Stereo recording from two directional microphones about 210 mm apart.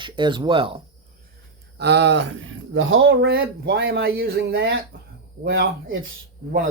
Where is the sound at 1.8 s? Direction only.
55° right (ahead or behind).